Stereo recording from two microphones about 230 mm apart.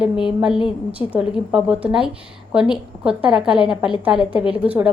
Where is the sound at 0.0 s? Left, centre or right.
Left.